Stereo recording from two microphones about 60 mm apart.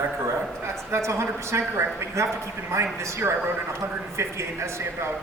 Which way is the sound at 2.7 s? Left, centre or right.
Right.